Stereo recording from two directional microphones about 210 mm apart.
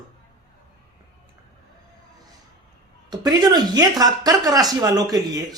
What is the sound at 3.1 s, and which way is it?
Speech, 20° right (ahead or behind).